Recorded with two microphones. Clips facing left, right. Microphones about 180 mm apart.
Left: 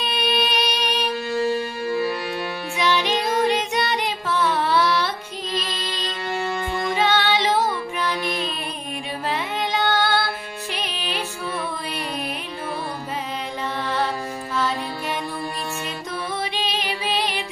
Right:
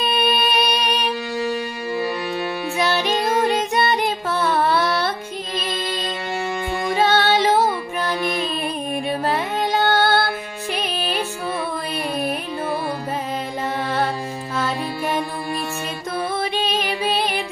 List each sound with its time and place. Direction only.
0.0 s music: 45° right (ahead or behind)
2.8 s music: 45° right (ahead or behind)
7.0 s music: 45° right (ahead or behind)
9.2 s music: 45° right (ahead or behind)
14.5 s music: 50° right (ahead or behind)
16.3 s music: 50° right (ahead or behind)